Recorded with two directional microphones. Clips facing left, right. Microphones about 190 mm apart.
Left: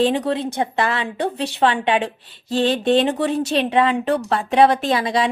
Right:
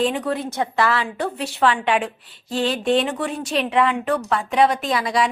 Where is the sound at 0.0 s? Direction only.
30° left (ahead or behind).